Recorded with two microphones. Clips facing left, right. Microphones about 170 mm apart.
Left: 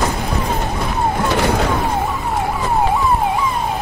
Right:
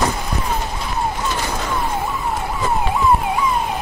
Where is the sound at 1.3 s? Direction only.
65° left (ahead or behind).